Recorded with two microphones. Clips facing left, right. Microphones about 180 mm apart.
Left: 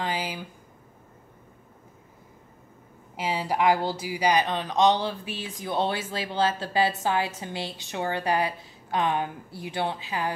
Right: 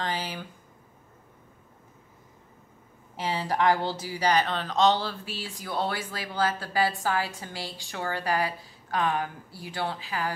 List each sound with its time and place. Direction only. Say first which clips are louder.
0.0 s speech: left 2 dB; 10° left (ahead or behind)
3.2 s speech: left 1 dB; 15° left (ahead or behind)